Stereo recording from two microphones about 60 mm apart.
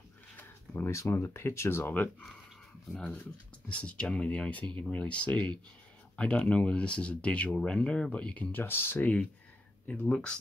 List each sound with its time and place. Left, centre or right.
0.8 s speech: left
3.6 s speech: left
8.5 s speech: left
9.0 s speech: left